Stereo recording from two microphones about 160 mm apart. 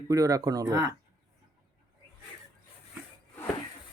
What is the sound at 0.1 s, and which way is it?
Speech, 20° right (ahead or behind).